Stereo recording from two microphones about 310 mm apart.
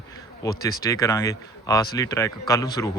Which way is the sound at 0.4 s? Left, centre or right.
Centre.